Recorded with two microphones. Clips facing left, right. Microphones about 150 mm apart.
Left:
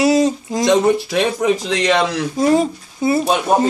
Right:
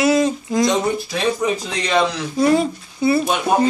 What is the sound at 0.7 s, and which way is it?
Speech, 85° left.